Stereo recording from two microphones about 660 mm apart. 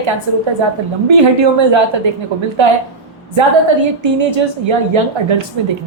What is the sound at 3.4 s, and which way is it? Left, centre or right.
A woman's voice, right.